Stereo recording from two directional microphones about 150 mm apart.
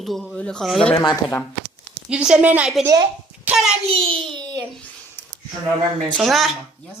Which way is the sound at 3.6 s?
Centre (ahead or behind).